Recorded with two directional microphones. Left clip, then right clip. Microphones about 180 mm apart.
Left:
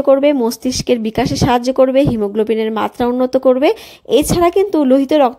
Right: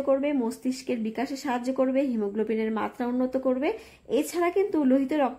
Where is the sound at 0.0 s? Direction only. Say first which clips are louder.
Left 14 dB; 40° left (ahead or behind).